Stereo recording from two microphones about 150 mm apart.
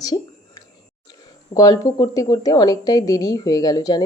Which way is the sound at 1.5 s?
25° left (ahead or behind).